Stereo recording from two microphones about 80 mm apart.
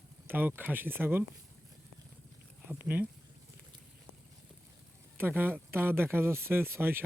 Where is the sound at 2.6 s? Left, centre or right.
Right.